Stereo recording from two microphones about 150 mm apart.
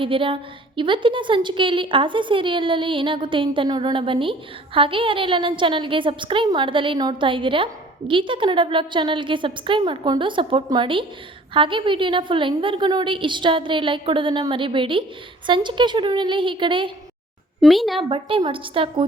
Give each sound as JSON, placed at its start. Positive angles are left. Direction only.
{"t": 0.0, "sound": "a woman's voice", "side_deg": -35}
{"t": 17.6, "sound": "speech", "side_deg": 0}
{"t": 18.1, "sound": "a woman's voice", "side_deg": -35}